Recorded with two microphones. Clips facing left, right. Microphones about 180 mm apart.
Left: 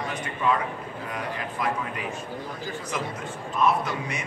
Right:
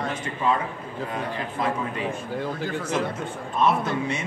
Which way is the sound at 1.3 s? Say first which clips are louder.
Right 1 dB; 30° right (ahead or behind).